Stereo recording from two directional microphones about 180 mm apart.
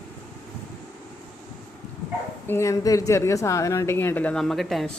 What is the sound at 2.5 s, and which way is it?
A woman's voice, 15° left (ahead or behind).